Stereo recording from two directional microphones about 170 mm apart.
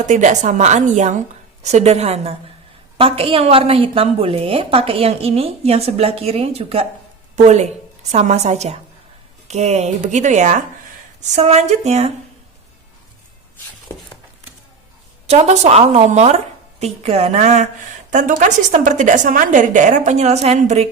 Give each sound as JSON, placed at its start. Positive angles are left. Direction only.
{"t": 0.0, "sound": "a woman's voice", "side_deg": -45}
{"t": 15.3, "sound": "a woman's voice", "side_deg": -40}